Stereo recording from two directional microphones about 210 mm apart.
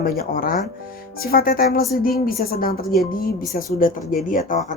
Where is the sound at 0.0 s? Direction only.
45° left (ahead or behind).